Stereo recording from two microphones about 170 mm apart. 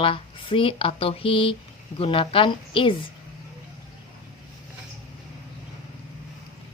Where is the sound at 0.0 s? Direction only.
30° left (ahead or behind).